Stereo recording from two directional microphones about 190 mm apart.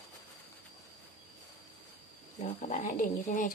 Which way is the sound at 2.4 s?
40° left (ahead or behind).